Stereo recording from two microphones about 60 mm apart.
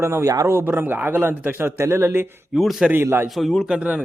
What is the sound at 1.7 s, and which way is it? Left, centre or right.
Speech, right.